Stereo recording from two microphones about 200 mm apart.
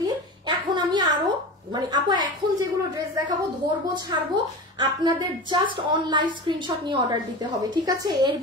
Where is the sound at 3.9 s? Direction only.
20° right (ahead or behind).